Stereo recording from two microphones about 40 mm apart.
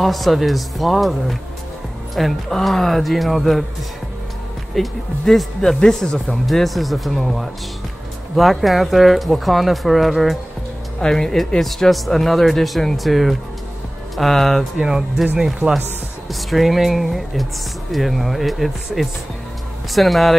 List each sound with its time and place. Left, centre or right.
0.0 s speech: centre
4.7 s speech: centre
6.4 s speech: centre
11.0 s speech: centre
14.8 s speech: centre
16.3 s speech: centre